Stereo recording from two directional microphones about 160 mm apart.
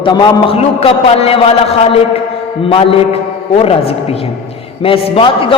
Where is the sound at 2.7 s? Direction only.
35° left (ahead or behind).